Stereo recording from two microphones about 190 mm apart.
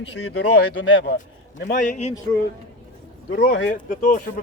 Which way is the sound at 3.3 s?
55° left (ahead or behind).